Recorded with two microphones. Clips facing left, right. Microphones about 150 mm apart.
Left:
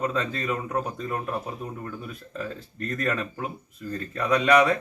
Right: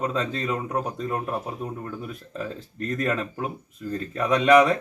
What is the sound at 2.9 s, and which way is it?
Speech, 20° right (ahead or behind).